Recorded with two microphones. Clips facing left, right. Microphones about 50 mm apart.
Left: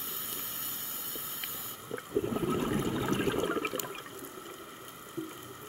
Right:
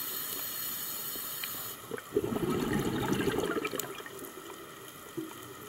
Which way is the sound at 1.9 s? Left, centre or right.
Left.